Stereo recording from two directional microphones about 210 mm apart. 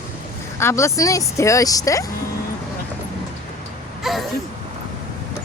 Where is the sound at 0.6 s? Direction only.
15° left (ahead or behind).